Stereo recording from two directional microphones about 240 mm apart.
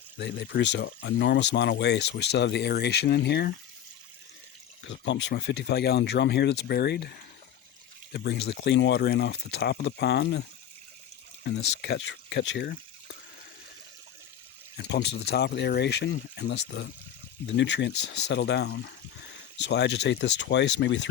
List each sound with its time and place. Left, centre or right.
0.2 s speech: left
4.9 s speech: left
8.1 s speech: left
11.8 s speech: left
14.8 s speech: left